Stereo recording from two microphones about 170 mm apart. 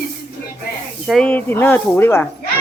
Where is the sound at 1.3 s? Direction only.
10° left (ahead or behind).